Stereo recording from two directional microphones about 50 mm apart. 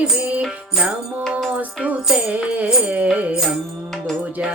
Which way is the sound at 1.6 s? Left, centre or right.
Right.